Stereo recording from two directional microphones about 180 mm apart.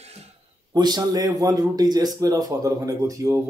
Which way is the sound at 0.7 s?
20° right (ahead or behind).